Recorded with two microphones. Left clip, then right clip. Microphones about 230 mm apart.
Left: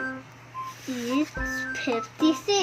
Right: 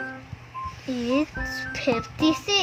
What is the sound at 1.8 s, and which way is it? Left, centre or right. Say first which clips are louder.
Speech: right 2 dB; right.